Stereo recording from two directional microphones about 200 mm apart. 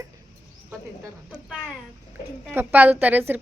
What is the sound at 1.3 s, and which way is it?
A woman's voice, 5° right (ahead or behind).